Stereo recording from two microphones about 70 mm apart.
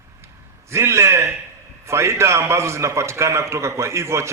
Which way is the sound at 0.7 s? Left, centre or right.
Right.